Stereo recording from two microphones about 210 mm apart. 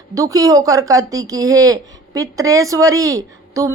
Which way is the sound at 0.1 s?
15° right (ahead or behind).